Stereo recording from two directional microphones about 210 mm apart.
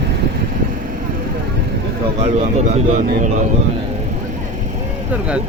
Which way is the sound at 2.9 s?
35° right (ahead or behind).